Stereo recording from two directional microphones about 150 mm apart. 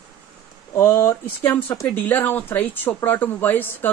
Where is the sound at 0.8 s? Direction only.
15° left (ahead or behind).